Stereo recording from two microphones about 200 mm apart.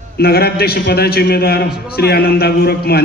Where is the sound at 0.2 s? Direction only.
50° left (ahead or behind).